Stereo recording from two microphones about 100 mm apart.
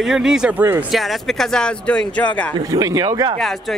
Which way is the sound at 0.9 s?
Centre (ahead or behind).